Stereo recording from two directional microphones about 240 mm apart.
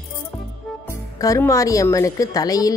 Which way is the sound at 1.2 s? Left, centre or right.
Centre.